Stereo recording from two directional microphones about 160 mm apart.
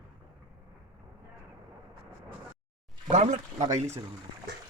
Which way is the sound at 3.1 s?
45° right (ahead or behind).